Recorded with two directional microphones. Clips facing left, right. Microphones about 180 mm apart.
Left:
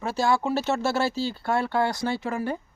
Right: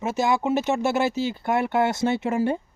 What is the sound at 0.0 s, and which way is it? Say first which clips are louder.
Speech: right 1 dB; 20° right (ahead or behind).